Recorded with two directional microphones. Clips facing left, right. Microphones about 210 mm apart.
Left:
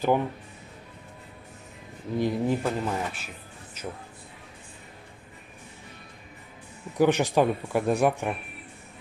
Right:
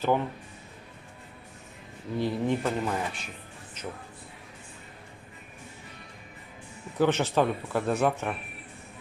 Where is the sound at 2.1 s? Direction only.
10° left (ahead or behind).